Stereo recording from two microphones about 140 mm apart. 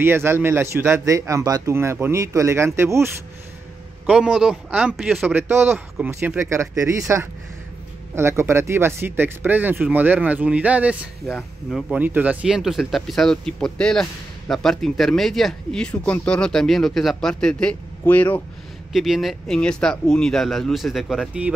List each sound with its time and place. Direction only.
0.0 s speech: 15° right (ahead or behind)
4.0 s speech: 5° right (ahead or behind); by 18.4 s 10° left (ahead or behind)
18.9 s speech: centre (ahead or behind)